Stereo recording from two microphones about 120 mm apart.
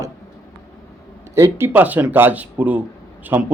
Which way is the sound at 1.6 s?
15° right (ahead or behind).